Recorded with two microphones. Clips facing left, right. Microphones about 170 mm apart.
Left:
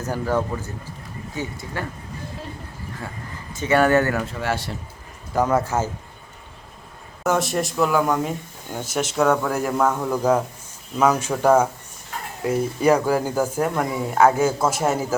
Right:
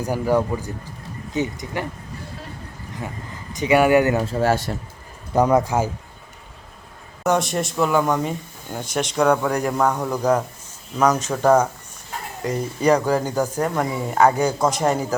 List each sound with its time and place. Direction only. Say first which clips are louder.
0.0 s speech: right 3 dB; 15° right (ahead or behind)
3.0 s speech: right 5 dB; 20° right (ahead or behind)
4.2 s speech: right 6 dB; 35° right (ahead or behind)
5.3 s speech: right 3 dB; 15° right (ahead or behind)
7.3 s speech: right 1 dB; centre (ahead or behind)